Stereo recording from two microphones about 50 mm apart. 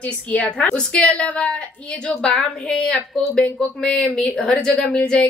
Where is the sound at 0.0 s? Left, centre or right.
Left.